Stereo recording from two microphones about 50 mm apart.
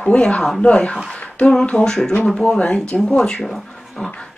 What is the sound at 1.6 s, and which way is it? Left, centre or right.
Speech, centre.